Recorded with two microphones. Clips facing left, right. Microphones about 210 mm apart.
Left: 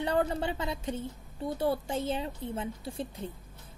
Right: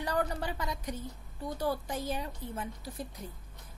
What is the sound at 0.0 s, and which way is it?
Speech, 25° left (ahead or behind).